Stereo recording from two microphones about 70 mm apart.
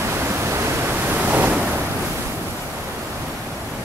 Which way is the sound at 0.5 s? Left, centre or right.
Right.